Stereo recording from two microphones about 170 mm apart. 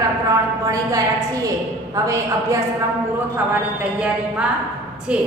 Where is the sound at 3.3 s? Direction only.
5° right (ahead or behind).